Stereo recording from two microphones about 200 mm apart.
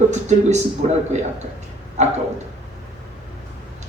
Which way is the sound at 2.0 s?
35° right (ahead or behind).